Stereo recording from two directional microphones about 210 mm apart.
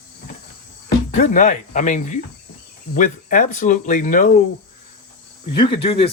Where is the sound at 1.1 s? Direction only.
35° left (ahead or behind).